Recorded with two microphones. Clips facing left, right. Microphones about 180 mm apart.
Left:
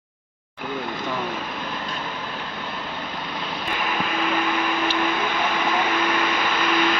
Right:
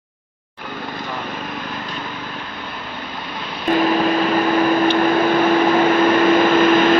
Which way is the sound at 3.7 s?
40° right (ahead or behind).